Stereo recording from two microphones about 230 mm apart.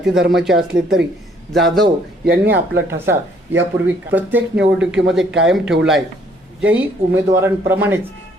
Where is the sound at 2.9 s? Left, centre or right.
Centre.